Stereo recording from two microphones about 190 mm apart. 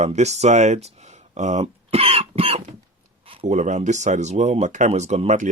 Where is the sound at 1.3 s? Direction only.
35° right (ahead or behind).